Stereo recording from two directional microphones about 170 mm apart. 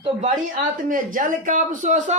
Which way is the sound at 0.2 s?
50° right (ahead or behind).